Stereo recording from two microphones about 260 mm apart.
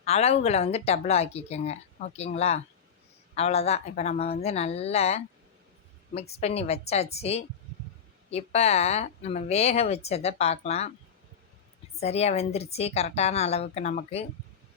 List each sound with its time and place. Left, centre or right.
0.0 s speech: left
6.4 s speech: left
11.9 s speech: left